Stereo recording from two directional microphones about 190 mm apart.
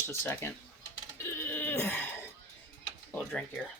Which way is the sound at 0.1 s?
15° left (ahead or behind).